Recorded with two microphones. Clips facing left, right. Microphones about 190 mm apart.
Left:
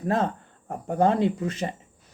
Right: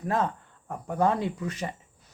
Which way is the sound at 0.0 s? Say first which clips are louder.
Left 3 dB; 25° left (ahead or behind).